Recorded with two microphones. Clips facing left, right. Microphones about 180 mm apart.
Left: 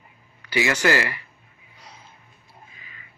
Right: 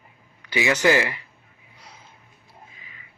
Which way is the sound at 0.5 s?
20° right (ahead or behind).